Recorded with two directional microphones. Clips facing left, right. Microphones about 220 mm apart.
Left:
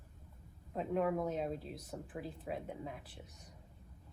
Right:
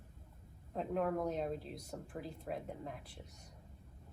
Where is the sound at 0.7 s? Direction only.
Centre (ahead or behind).